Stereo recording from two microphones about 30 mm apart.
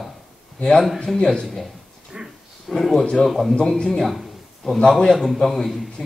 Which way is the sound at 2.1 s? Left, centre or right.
Right.